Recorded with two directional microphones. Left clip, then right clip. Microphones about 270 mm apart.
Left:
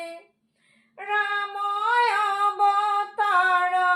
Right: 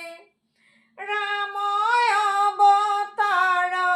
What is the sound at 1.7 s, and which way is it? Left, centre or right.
Humming, right.